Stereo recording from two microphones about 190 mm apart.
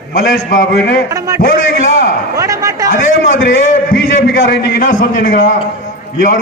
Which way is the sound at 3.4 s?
45° left (ahead or behind).